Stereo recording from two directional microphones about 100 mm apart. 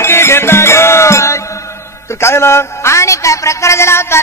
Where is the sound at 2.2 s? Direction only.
25° left (ahead or behind).